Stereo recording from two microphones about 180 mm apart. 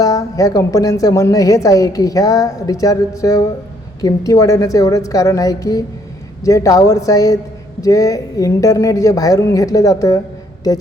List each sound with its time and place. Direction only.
0.0 s a woman's voice: 20° left (ahead or behind)